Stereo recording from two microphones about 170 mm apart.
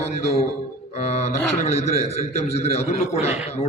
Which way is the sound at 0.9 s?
40° left (ahead or behind).